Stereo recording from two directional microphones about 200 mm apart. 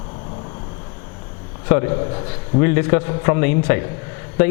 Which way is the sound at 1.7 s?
20° left (ahead or behind).